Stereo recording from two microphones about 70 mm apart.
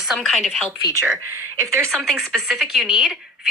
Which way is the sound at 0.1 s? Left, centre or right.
Centre.